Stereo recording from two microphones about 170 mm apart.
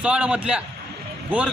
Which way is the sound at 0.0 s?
10° right (ahead or behind).